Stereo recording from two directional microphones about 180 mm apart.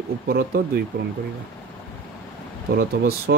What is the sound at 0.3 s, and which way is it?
Speech, 60° right (ahead or behind).